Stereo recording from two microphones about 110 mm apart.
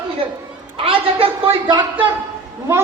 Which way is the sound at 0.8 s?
60° right (ahead or behind).